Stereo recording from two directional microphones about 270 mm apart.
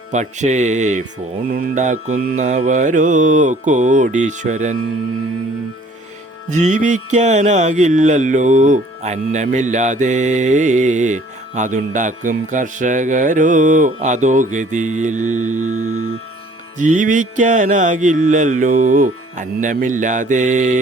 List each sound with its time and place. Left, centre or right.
0.1 s music: right
6.5 s music: right